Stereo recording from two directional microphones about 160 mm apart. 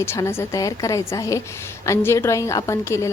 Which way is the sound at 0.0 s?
15° left (ahead or behind).